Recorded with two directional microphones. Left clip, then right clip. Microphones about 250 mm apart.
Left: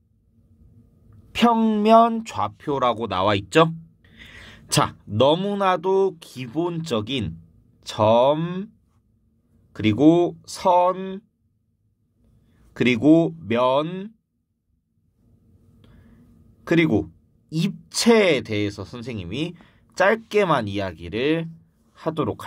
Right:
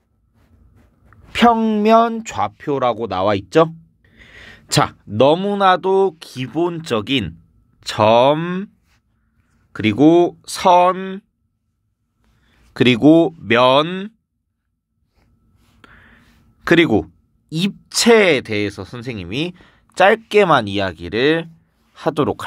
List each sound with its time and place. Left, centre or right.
1.3 s speech: right
9.7 s speech: right
12.7 s speech: right
15.8 s gasp: right
16.6 s speech: right